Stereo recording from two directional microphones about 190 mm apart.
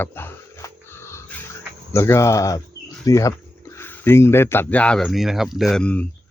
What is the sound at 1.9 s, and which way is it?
Speech, 15° left (ahead or behind).